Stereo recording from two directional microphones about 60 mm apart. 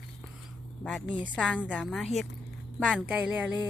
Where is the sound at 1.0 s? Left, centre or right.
Centre.